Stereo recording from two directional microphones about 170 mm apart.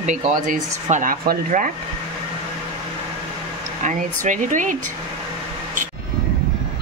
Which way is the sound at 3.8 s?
50° right (ahead or behind).